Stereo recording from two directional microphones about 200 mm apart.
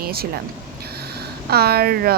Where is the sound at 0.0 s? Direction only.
50° right (ahead or behind).